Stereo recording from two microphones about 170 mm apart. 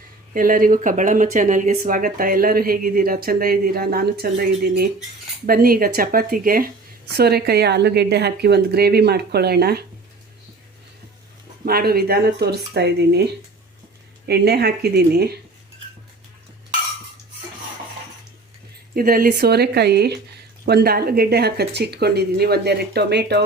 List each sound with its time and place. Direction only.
0.3 s speech: 55° right (ahead or behind)
7.1 s speech: 70° right (ahead or behind)
11.6 s speech: 65° right (ahead or behind)
14.3 s speech: 70° right (ahead or behind)
18.9 s speech: 60° right (ahead or behind); by 23.5 s 75° right (ahead or behind)